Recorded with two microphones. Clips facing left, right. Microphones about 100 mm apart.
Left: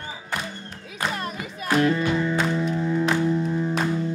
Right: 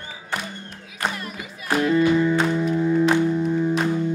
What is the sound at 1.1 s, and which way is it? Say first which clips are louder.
Music: left 3 dB; 40° left (ahead or behind).